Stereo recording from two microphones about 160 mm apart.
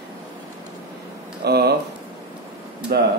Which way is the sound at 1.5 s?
90° right.